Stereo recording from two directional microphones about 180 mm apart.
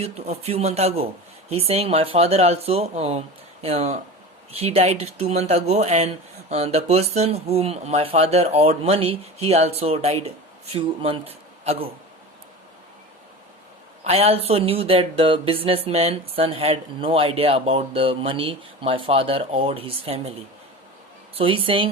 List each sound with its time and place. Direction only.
0.0 s speech: 35° right (ahead or behind)
14.0 s speech: 35° right (ahead or behind)
21.3 s a woman's voice: 30° right (ahead or behind)